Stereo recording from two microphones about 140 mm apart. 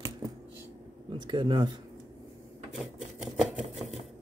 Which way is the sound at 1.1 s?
35° right (ahead or behind).